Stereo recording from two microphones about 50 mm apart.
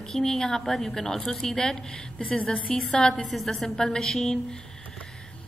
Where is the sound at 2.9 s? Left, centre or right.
Centre.